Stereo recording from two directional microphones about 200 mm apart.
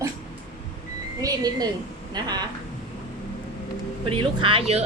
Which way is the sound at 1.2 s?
20° right (ahead or behind).